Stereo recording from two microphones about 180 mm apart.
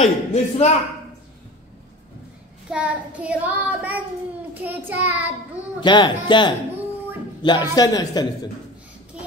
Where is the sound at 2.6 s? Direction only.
5° right (ahead or behind).